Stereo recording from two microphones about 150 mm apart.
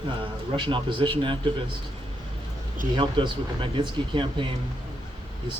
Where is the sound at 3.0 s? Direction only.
35° right (ahead or behind).